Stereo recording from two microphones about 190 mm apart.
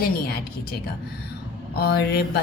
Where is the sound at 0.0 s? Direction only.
55° left (ahead or behind).